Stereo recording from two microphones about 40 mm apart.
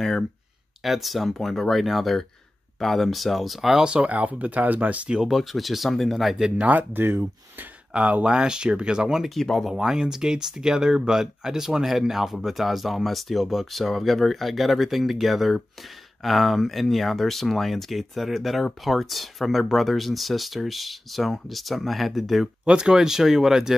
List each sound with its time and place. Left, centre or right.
0.8 s speech: centre
3.7 s speech: right
5.3 s speech: centre
6.6 s speech: right
6.9 s speech: right
7.9 s speech: right
9.3 s speech: centre
9.7 s speech: centre
22.7 s speech: centre